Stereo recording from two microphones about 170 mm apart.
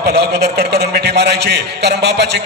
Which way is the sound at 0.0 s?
70° right (ahead or behind).